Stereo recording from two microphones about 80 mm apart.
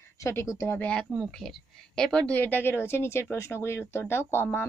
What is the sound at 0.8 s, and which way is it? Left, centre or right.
A woman's voice, centre.